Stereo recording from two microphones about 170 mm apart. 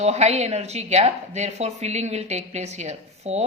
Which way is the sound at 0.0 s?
40° right (ahead or behind).